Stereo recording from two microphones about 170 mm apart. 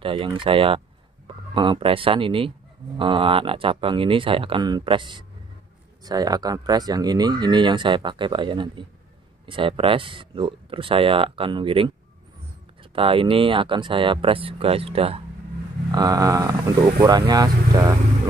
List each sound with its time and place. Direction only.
0.0 s speech: 30° right (ahead or behind)
12.9 s speech: 30° right (ahead or behind)
15.9 s speech: 25° right (ahead or behind)